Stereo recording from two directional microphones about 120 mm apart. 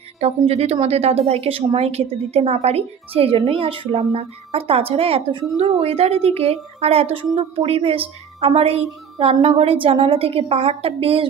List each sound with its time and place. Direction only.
0.2 s a woman's voice: 60° right (ahead or behind)